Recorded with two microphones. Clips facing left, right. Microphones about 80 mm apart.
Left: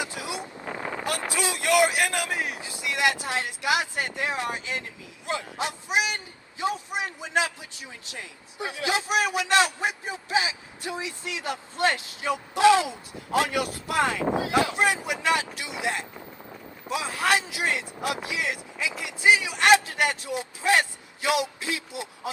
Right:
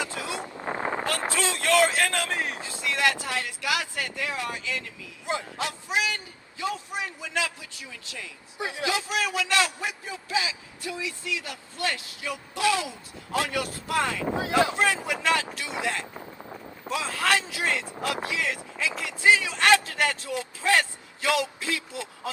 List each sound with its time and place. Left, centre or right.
0.0 s vehicle: centre
0.3 s vehicle: right
1.3 s a man's voice: centre
5.2 s speech: right
5.5 s a man's voice: left
8.5 s speech: right
8.9 s a man's voice: left
16.1 s run: centre
16.9 s a man's voice: centre